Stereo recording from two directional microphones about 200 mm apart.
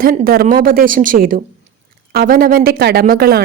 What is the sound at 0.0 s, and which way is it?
A woman's voice, 45° right (ahead or behind).